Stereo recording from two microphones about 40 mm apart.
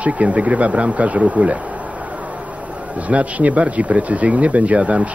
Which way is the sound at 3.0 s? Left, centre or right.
Right.